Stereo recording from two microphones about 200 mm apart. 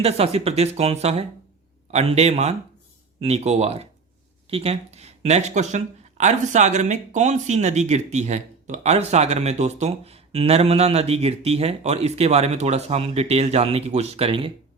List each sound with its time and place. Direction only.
0.0 s speech: 30° right (ahead or behind)